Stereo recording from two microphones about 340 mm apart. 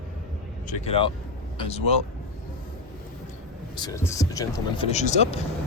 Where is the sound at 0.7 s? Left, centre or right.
Centre.